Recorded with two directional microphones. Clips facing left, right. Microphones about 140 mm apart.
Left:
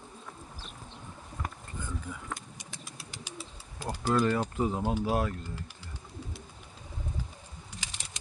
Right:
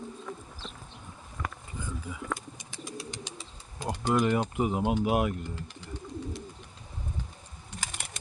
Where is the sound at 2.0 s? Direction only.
5° right (ahead or behind).